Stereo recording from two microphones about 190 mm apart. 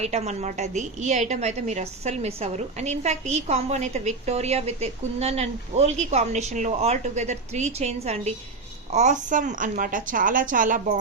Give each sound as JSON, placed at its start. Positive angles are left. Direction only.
{"t": 0.0, "sound": "a woman's voice", "side_deg": -35}